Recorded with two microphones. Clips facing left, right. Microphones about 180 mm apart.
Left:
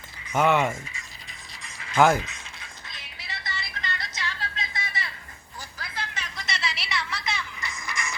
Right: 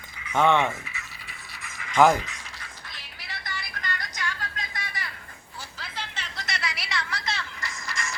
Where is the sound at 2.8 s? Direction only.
20° left (ahead or behind).